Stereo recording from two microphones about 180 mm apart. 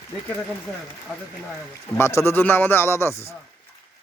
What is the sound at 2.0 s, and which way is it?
A man's voice, 15° left (ahead or behind).